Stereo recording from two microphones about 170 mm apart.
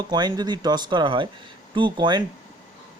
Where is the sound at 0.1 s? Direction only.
25° right (ahead or behind).